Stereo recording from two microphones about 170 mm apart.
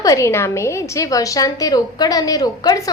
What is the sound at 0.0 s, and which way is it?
A woman's voice, 20° left (ahead or behind).